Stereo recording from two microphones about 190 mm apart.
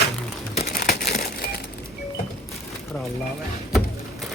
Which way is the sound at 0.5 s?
40° left (ahead or behind).